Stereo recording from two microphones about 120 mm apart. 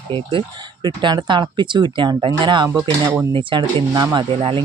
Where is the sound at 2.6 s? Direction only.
20° right (ahead or behind).